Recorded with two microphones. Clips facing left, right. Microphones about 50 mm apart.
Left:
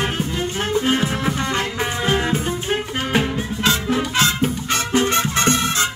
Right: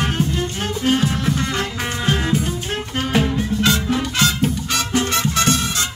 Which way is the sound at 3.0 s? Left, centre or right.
Centre.